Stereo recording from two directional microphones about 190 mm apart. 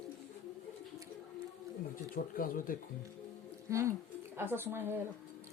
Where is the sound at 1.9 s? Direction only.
50° left (ahead or behind).